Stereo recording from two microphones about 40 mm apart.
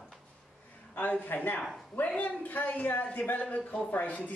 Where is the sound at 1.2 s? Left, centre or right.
Left.